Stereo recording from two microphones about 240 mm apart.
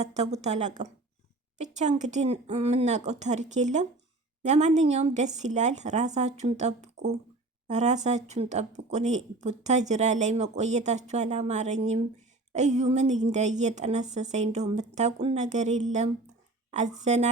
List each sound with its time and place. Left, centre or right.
0.0 s speech: right